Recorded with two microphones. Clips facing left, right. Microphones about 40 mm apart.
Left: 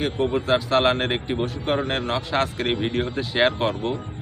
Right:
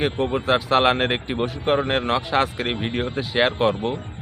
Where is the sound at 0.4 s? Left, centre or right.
Centre.